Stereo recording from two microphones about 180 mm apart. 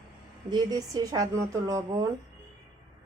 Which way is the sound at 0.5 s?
20° right (ahead or behind).